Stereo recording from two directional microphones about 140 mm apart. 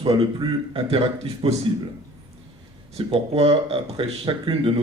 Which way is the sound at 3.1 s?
40° right (ahead or behind).